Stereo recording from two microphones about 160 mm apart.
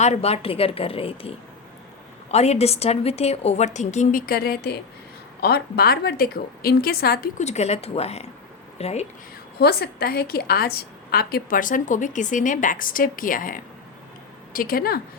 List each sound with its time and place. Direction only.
0.0 s a woman's voice: 45° left (ahead or behind)
4.3 s a woman's voice: 75° left (ahead or behind)
7.3 s a woman's voice: 45° left (ahead or behind)
9.6 s a woman's voice: 80° left